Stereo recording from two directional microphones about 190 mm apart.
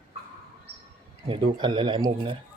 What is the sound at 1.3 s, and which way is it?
Speech, 25° right (ahead or behind).